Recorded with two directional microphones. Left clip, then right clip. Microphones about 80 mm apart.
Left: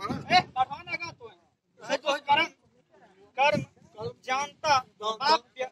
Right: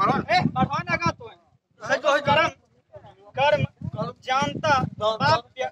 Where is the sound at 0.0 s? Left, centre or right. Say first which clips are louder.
Right 4 dB; right.